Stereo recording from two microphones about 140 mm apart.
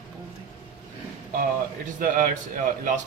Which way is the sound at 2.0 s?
70° right (ahead or behind).